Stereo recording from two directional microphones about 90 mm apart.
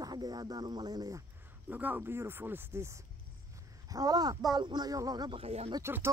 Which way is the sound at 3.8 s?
45° right (ahead or behind).